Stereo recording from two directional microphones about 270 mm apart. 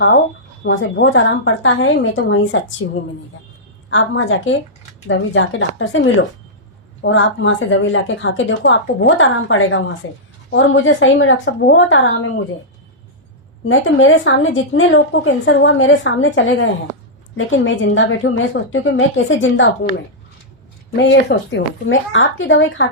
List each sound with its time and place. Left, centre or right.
0.6 s a woman's voice: left
13.7 s a woman's voice: left
20.9 s speech: left